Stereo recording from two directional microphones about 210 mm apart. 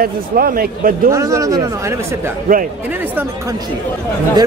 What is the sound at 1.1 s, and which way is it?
Speech, 15° right (ahead or behind).